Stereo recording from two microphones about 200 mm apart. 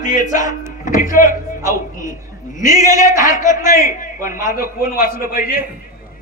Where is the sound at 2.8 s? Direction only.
15° right (ahead or behind).